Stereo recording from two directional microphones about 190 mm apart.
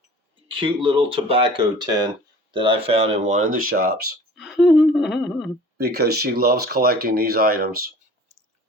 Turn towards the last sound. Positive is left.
turn(degrees=-50)  # may be behind; listen again after turning